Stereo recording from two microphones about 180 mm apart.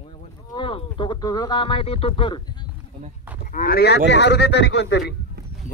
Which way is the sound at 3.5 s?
50° left (ahead or behind).